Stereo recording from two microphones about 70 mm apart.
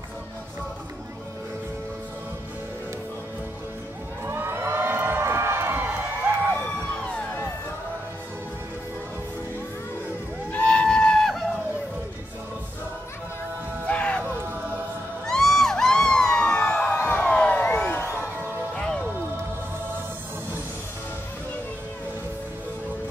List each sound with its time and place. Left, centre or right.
4.2 s cheering: right
6.6 s music: centre
10.5 s a sound: left
13.8 s music: centre
14.2 s music: right
15.2 s music: centre
16.8 s music: left
17.4 s a sound: left
17.7 s crowd: left